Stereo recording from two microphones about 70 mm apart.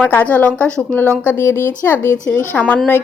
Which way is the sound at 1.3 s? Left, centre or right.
Left.